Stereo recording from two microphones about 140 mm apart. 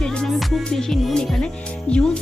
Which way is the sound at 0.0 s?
5° left (ahead or behind).